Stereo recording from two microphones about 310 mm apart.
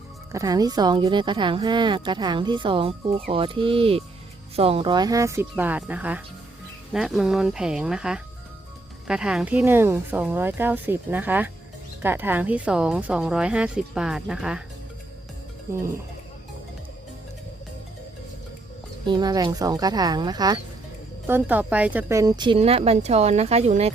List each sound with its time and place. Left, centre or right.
0.3 s a woman's voice: centre
19.0 s a woman's voice: centre